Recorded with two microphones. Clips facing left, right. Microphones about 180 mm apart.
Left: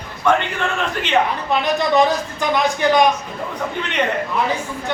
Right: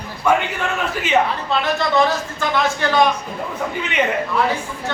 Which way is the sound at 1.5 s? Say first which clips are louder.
Left 3 dB; 15° left (ahead or behind).